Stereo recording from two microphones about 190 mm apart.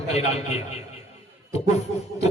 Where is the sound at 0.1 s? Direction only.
35° left (ahead or behind).